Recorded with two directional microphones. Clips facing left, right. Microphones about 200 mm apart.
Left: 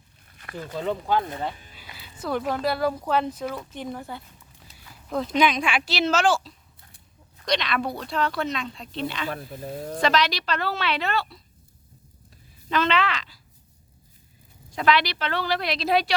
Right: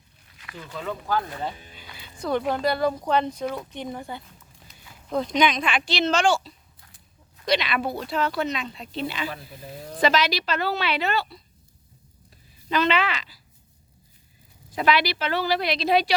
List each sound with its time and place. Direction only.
0.3 s a sound: 45° left (ahead or behind)
0.8 s speech: 25° left (ahead or behind)
1.7 s speech: 5° left (ahead or behind)
9.3 s speech: 50° left (ahead or behind)
10.0 s speech: 5° right (ahead or behind)
12.6 s speech: centre (ahead or behind)
14.7 s speech: 5° right (ahead or behind)